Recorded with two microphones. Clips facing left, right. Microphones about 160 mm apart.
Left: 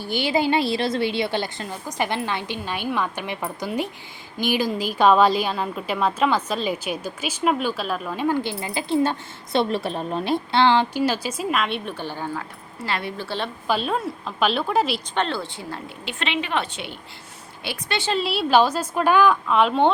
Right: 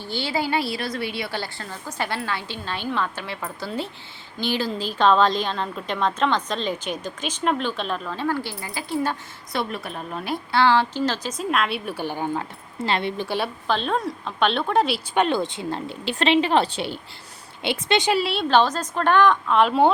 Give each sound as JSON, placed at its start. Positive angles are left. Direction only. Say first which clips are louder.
{"t": 0.0, "sound": "a woman's voice", "louder": "left 4 dB", "side_deg": 15}
{"t": 13.7, "sound": "a woman's voice", "louder": "left 2 dB", "side_deg": 5}
{"t": 15.1, "sound": "a woman's voice", "louder": "right 4 dB", "side_deg": -15}
{"t": 16.0, "sound": "a woman's voice", "louder": "right 8 dB", "side_deg": -35}
{"t": 17.6, "sound": "speech", "louder": "right 6 dB", "side_deg": -20}
{"t": 18.2, "sound": "a woman's voice", "louder": "left 1 dB", "side_deg": 5}